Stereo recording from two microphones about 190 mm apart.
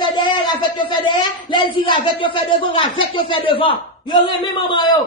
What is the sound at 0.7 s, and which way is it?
Speech, 25° left (ahead or behind).